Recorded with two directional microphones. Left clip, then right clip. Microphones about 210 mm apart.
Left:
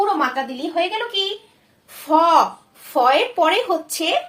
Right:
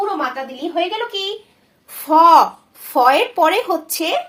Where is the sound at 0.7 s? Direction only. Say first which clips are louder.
Right 1 dB; 25° right (ahead or behind).